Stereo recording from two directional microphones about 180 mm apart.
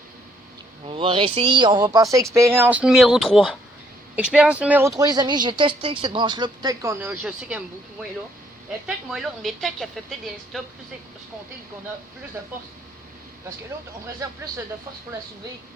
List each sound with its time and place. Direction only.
0.9 s speech: 30° right (ahead or behind)
7.0 s speech: 10° right (ahead or behind)
9.0 s a woman's voice: centre (ahead or behind)
14.2 s speech: 20° right (ahead or behind)